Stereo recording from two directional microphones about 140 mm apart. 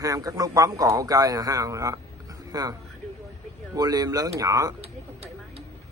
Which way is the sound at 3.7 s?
30° right (ahead or behind).